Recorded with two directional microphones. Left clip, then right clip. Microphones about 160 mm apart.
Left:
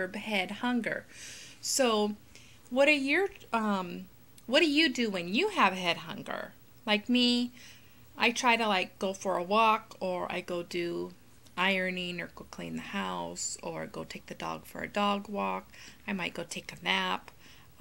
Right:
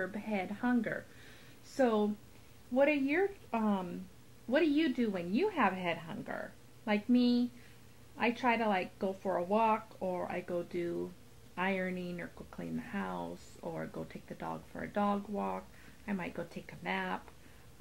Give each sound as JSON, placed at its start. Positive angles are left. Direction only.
{"t": 0.0, "sound": "speech", "side_deg": 25}